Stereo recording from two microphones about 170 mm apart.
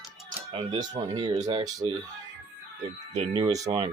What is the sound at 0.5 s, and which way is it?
Speech, 30° right (ahead or behind).